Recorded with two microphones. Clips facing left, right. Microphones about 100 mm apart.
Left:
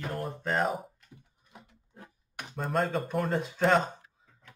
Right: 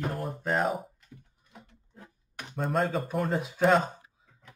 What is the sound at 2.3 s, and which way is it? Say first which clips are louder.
Speech: right 1 dB; 5° left (ahead or behind).